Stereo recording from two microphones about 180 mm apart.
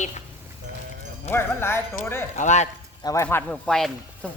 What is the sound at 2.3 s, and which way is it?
Speech, 40° left (ahead or behind).